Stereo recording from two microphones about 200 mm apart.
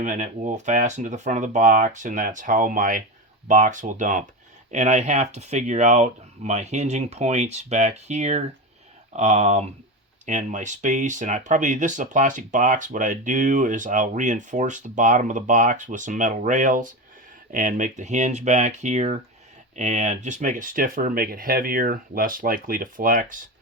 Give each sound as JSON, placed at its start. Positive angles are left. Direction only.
{"t": 0.0, "sound": "speech", "side_deg": -35}